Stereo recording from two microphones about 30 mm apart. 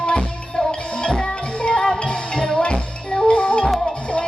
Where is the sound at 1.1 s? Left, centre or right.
Left.